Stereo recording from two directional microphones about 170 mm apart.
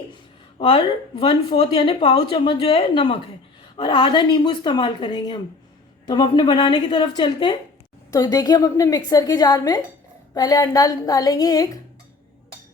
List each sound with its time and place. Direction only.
0.6 s a woman's voice: 25° left (ahead or behind)